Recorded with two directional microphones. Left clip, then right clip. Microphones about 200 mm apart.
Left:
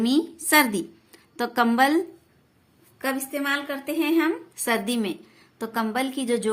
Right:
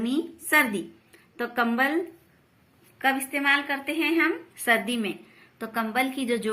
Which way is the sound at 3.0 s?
30° left (ahead or behind).